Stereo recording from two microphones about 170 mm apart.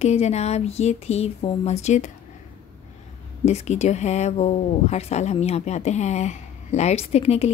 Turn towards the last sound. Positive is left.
turn(degrees=35)  # may be behind; listen again after turning